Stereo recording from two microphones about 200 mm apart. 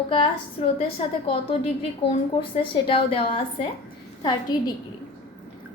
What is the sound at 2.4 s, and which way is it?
A woman's voice, 25° left (ahead or behind).